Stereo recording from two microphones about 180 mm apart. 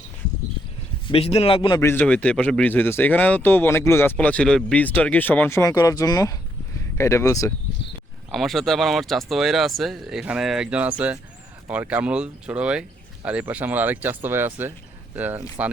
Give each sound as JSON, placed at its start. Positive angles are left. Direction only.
{"t": 1.0, "sound": "a man's voice", "side_deg": 35}
{"t": 1.8, "sound": "speech", "side_deg": 10}
{"t": 8.3, "sound": "speech", "side_deg": 0}